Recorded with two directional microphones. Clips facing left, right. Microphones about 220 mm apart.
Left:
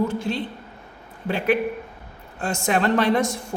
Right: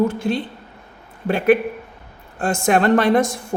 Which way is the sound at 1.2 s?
50° right (ahead or behind).